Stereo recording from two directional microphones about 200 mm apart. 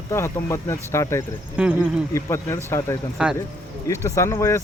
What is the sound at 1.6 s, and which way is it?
Speech, 5° right (ahead or behind).